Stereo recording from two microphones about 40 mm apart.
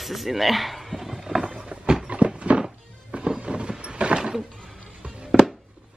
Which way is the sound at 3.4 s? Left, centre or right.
Right.